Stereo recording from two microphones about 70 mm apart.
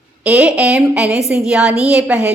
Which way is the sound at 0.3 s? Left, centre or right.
Centre.